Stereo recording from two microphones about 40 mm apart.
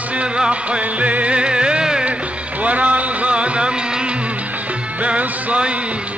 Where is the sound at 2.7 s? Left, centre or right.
Right.